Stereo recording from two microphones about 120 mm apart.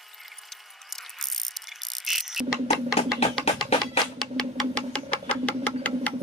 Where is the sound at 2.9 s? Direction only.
60° left (ahead or behind).